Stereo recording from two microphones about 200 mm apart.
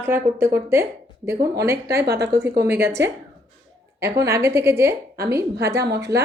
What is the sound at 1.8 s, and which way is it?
Speech, 50° right (ahead or behind).